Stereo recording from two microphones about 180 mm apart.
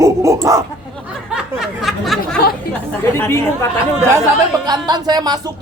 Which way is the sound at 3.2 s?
15° left (ahead or behind).